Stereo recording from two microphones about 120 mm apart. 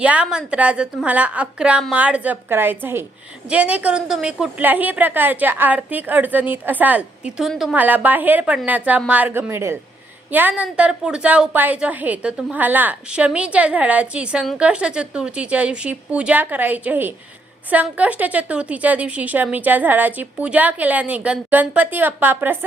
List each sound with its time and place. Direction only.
0.0 s a woman's voice: 10° right (ahead or behind)
7.8 s a woman's voice: 15° right (ahead or behind)